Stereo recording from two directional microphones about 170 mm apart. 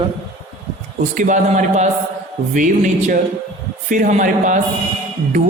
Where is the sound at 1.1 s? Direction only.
50° right (ahead or behind).